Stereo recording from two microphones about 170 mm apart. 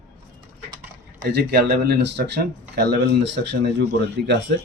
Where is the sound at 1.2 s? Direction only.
65° right (ahead or behind); by 4.4 s 90° right.